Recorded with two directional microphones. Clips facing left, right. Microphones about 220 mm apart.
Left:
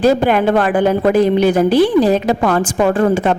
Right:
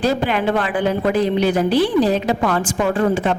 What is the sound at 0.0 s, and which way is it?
Speech, 50° left (ahead or behind).